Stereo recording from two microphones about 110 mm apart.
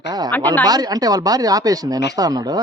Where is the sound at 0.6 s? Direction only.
35° right (ahead or behind).